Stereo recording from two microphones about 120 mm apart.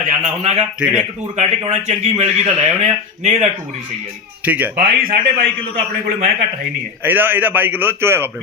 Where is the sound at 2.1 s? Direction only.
70° right (ahead or behind).